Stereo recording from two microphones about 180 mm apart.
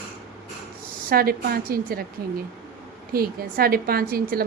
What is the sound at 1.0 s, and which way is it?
Speech, 55° right (ahead or behind).